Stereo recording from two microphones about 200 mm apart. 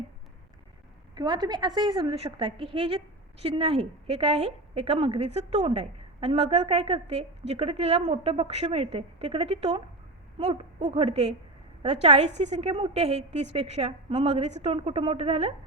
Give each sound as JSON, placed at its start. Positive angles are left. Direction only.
{"t": 1.1, "sound": "a woman's voice", "side_deg": -20}